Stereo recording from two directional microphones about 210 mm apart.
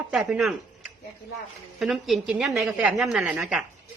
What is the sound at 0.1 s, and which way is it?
A woman's voice, centre (ahead or behind).